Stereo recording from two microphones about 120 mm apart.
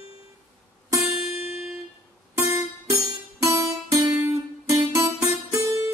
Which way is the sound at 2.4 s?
25° right (ahead or behind).